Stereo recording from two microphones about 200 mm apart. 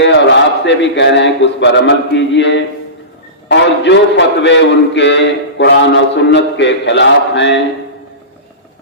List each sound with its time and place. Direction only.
0.0 s a man's voice: 60° left (ahead or behind)